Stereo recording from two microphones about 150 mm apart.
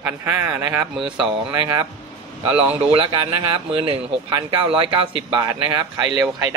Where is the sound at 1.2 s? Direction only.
30° right (ahead or behind).